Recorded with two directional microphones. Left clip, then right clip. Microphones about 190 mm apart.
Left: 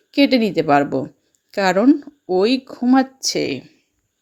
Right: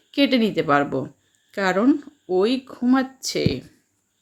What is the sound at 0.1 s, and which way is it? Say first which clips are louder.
A woman's voice: left 4 dB; 30° left (ahead or behind).